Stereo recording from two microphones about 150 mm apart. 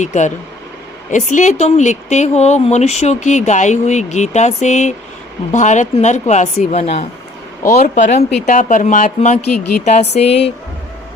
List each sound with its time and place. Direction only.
0.0 s speech: 55° left (ahead or behind)